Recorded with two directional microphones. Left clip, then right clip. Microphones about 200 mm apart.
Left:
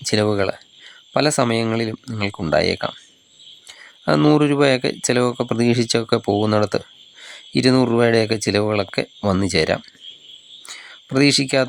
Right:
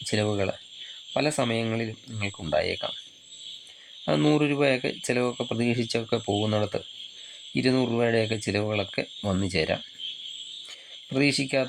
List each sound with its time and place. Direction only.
0.0 s speech: 30° left (ahead or behind)
4.0 s speech: 30° left (ahead or behind)
10.7 s a sound: 30° left (ahead or behind)